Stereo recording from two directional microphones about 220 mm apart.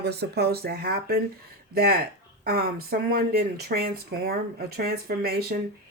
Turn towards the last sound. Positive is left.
turn(degrees=-45)  # may be behind; listen again after turning